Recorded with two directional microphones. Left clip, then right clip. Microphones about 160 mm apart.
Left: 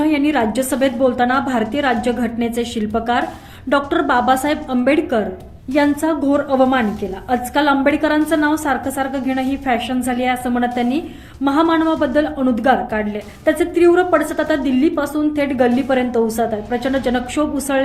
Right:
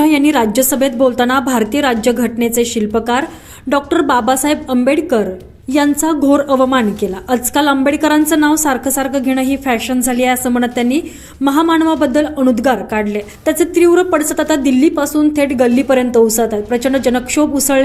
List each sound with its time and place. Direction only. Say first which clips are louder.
0.0 s a woman's voice: right 5 dB; 25° right (ahead or behind)